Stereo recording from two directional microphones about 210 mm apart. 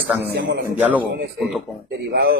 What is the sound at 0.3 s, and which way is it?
Speech, 55° right (ahead or behind).